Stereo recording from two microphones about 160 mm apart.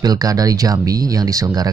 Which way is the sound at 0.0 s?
25° right (ahead or behind).